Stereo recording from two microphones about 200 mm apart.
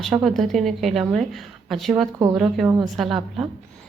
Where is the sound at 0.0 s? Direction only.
Centre (ahead or behind).